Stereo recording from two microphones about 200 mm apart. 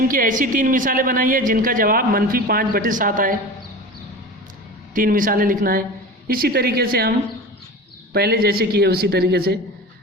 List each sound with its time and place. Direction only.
0.1 s speech: 45° right (ahead or behind)
4.9 s speech: 45° right (ahead or behind)
8.1 s speech: 50° right (ahead or behind)